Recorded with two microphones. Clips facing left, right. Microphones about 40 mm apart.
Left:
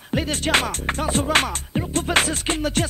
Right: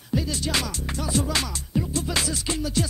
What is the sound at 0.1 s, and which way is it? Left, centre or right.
Music, left.